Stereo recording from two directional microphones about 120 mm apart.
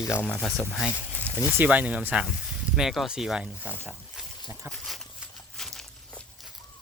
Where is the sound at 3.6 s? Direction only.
15° left (ahead or behind).